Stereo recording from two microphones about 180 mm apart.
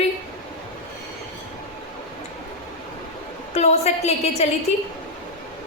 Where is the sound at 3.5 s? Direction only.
35° left (ahead or behind).